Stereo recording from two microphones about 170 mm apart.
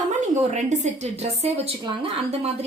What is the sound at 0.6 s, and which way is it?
A woman's voice, 45° right (ahead or behind).